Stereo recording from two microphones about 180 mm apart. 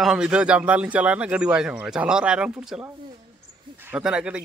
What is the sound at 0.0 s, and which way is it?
Speech, 5° right (ahead or behind).